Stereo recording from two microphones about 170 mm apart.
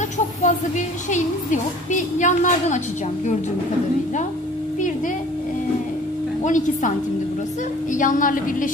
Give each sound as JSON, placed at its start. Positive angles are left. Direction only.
{"t": 0.4, "sound": "a woman's voice", "side_deg": 45}
{"t": 6.4, "sound": "a woman's voice", "side_deg": 45}
{"t": 7.9, "sound": "a woman's voice", "side_deg": 50}